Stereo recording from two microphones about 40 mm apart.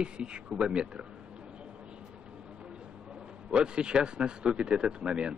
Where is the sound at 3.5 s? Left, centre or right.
Right.